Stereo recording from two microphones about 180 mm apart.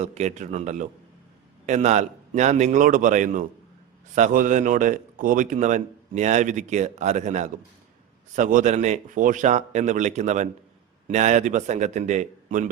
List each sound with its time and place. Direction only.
0.0 s speech: 40° right (ahead or behind)